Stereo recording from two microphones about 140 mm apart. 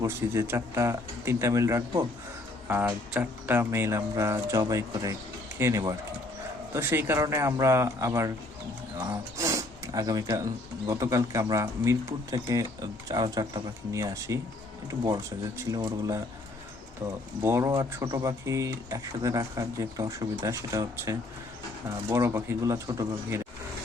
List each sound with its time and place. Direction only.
0.0 s speech: 20° right (ahead or behind)
17.4 s speech: 20° right (ahead or behind)